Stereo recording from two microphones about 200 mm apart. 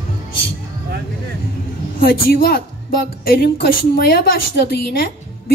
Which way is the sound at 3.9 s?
50° left (ahead or behind).